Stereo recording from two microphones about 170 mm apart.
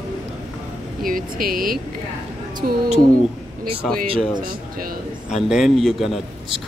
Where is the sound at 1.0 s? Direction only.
55° right (ahead or behind).